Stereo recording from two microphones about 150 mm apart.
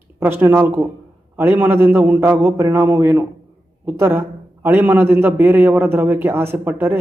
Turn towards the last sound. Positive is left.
turn(degrees=-15)  # may be behind; listen again after turning